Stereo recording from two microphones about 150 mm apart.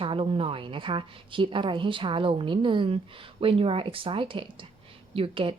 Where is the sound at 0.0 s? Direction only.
35° right (ahead or behind).